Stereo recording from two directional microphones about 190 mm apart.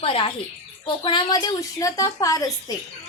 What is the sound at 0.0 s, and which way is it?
A woman's voice, 30° left (ahead or behind).